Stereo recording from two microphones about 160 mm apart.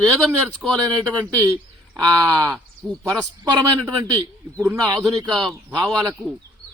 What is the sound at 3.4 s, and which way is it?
Speech, 20° right (ahead or behind).